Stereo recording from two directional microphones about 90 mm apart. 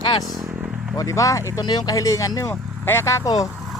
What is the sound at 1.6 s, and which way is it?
Speech, 50° left (ahead or behind).